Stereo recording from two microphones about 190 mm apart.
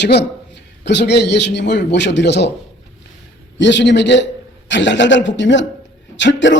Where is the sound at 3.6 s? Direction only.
70° left (ahead or behind).